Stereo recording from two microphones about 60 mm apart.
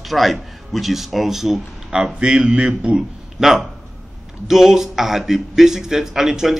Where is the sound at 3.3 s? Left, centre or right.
Centre.